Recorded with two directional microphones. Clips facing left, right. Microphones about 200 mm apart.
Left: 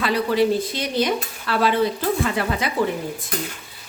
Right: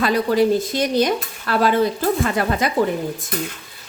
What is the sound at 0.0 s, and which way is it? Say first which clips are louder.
A woman's voice: right 2 dB; 45° right (ahead or behind).